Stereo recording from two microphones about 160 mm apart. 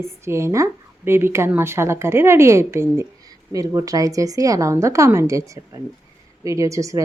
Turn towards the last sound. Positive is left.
turn(degrees=-20)  # may be behind; listen again after turning